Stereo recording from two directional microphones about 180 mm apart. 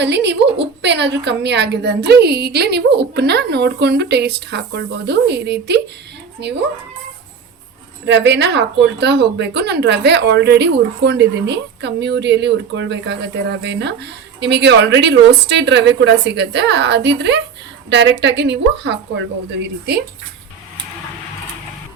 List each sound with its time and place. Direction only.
0.0 s a woman's voice: 70° right (ahead or behind)
8.0 s a woman's voice: 80° right